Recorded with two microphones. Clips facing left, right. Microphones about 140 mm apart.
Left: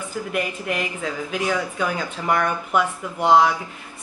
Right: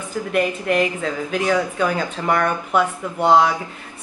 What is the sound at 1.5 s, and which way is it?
Speech, 40° right (ahead or behind).